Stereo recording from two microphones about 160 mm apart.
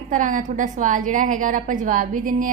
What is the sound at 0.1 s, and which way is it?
A woman's voice, 55° right (ahead or behind).